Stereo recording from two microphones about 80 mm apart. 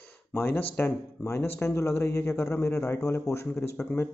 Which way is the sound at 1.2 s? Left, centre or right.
Left.